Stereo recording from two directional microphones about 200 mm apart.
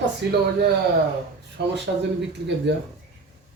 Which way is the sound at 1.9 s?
70° right (ahead or behind).